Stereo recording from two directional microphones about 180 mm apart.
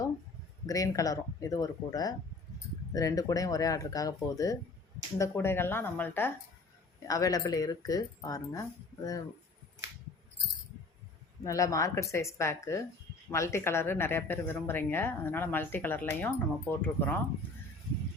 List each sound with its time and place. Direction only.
0.7 s speech: 20° left (ahead or behind)
11.4 s speech: 20° left (ahead or behind)